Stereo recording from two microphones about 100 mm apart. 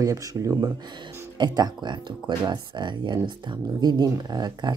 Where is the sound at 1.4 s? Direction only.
45° right (ahead or behind).